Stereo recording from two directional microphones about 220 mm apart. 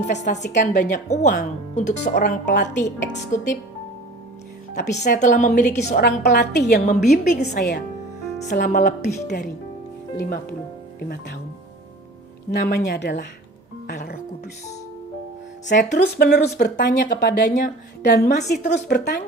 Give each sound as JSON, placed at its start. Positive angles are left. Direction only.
{"t": 0.0, "sound": "speech", "side_deg": 30}
{"t": 5.0, "sound": "speech", "side_deg": 35}
{"t": 5.9, "sound": "speech", "side_deg": 50}
{"t": 6.9, "sound": "speech", "side_deg": 35}
{"t": 7.3, "sound": "speech", "side_deg": 50}
{"t": 8.5, "sound": "speech", "side_deg": 35}
{"t": 11.0, "sound": "speech", "side_deg": 45}
{"t": 12.5, "sound": "speech", "side_deg": 50}
{"t": 16.0, "sound": "speech", "side_deg": 45}